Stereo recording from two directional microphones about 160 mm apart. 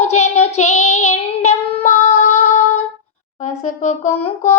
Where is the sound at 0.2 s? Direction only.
45° left (ahead or behind).